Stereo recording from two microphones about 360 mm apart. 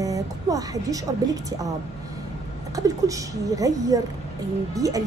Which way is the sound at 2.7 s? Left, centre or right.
Centre.